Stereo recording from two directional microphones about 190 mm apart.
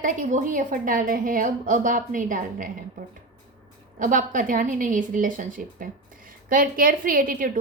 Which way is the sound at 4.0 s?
45° right (ahead or behind).